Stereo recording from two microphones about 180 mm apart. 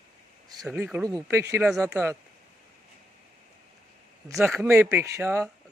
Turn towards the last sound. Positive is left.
turn(degrees=-10)  # may be behind; listen again after turning